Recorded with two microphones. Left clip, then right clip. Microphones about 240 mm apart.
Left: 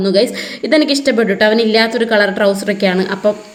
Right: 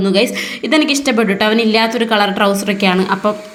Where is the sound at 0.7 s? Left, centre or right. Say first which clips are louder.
Left 2 dB; centre.